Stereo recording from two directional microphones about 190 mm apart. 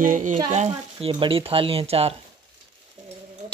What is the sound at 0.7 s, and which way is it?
Speech, 25° right (ahead or behind).